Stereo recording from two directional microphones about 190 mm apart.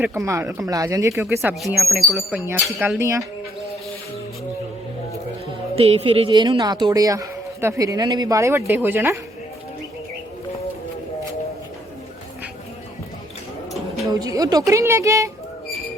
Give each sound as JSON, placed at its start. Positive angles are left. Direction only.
{"t": 0.0, "sound": "speech", "side_deg": -10}
{"t": 1.6, "sound": "speech", "side_deg": 0}
{"t": 3.0, "sound": "speech", "side_deg": -15}
{"t": 5.7, "sound": "a woman's voice", "side_deg": -30}
{"t": 14.1, "sound": "speech", "side_deg": -20}